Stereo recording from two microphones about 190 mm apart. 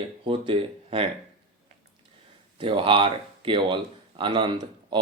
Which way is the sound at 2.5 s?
25° right (ahead or behind).